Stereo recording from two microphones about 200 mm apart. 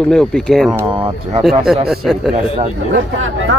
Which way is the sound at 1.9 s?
5° right (ahead or behind).